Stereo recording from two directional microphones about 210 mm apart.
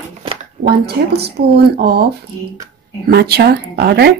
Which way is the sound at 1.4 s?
50° right (ahead or behind).